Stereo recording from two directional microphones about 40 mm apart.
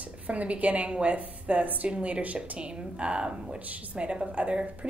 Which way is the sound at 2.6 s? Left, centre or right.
Right.